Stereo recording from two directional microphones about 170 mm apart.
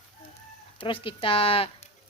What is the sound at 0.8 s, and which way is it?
Speech, 30° left (ahead or behind).